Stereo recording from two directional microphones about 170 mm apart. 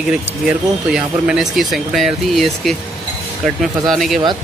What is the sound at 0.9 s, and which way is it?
Speech, 5° right (ahead or behind).